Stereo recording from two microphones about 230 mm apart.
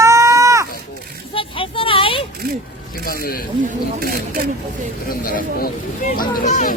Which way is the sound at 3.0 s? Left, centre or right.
Left.